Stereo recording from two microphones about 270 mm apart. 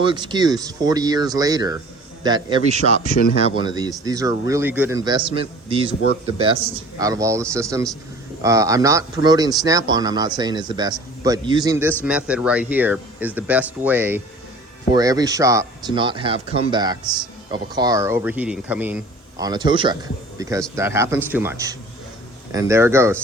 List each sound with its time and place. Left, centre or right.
0.0 s a man's voice: centre
7.0 s speech: centre